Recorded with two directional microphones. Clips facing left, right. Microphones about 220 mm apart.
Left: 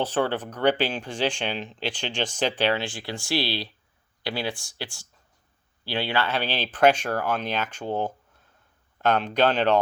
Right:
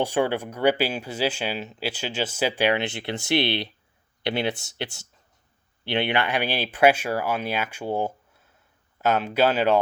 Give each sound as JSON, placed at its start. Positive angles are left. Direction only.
{"t": 0.0, "sound": "speech", "side_deg": -10}